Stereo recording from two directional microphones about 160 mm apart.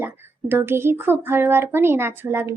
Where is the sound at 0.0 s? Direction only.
15° right (ahead or behind).